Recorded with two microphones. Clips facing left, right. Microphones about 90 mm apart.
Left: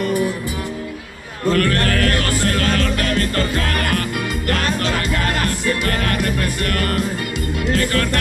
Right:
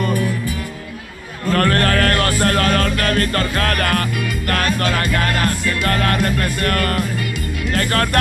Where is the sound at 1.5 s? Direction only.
45° right (ahead or behind).